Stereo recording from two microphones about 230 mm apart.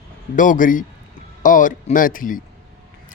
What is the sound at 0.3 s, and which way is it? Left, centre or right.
Speech, left.